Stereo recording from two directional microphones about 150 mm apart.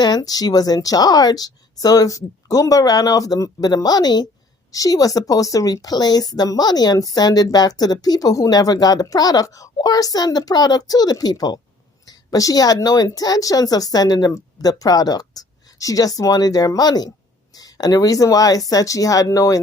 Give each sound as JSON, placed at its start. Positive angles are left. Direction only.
{"t": 0.0, "sound": "a woman's voice", "side_deg": 25}